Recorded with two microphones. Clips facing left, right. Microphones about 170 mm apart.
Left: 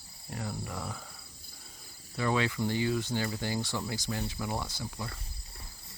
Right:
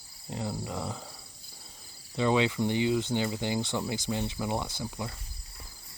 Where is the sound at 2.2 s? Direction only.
20° right (ahead or behind).